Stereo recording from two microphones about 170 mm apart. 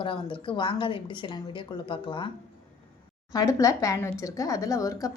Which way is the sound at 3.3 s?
20° left (ahead or behind).